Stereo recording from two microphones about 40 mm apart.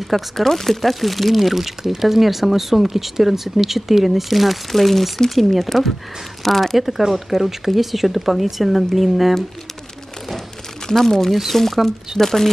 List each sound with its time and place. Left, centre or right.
0.1 s speech: centre
10.9 s speech: centre